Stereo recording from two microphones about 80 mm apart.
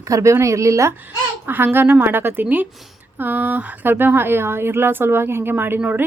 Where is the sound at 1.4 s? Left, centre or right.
Right.